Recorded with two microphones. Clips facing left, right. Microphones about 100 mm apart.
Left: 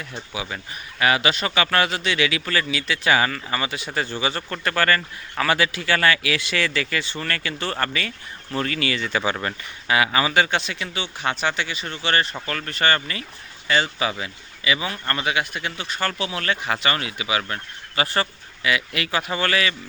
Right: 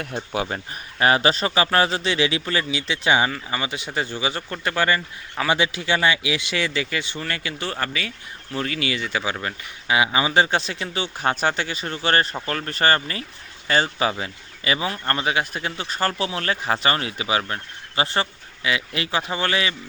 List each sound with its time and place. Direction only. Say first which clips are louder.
0.0 s speech: right 6 dB; 55° right (ahead or behind)
0.4 s speech: right 3 dB; 35° right (ahead or behind); by 9.6 s 5° right (ahead or behind)
9.8 s speech: even; 15° right (ahead or behind)